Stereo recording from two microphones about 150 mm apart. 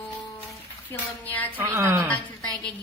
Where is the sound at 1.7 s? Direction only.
15° right (ahead or behind).